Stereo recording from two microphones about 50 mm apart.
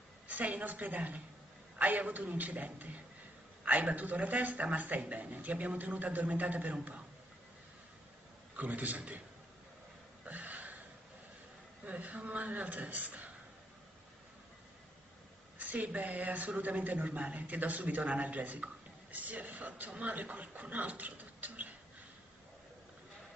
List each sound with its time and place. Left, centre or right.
0.3 s a man's voice: right
8.5 s a man's voice: right
10.2 s a sound: right
11.8 s a man's voice: right
15.7 s a man's voice: right